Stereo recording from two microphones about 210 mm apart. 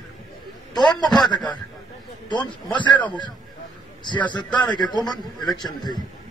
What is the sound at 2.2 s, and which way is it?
Speech, 20° left (ahead or behind).